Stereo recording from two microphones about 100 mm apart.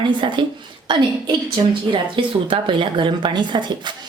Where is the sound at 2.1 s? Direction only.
60° right (ahead or behind).